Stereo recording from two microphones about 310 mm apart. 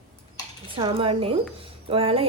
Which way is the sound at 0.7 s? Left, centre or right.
Centre.